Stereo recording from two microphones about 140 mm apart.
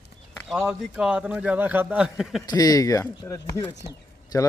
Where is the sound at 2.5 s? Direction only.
25° left (ahead or behind).